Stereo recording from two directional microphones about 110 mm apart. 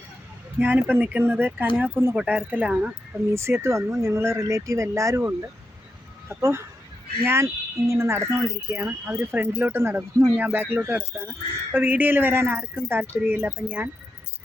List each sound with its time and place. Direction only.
0.6 s speech: 20° right (ahead or behind)
3.3 s speech: 25° right (ahead or behind)